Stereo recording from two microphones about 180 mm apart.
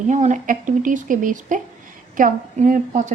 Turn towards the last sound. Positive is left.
turn(degrees=-45)  # may be behind; listen again after turning